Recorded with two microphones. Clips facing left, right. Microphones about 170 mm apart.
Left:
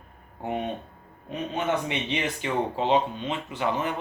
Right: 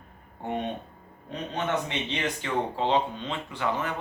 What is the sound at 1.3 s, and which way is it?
Speech, 15° left (ahead or behind).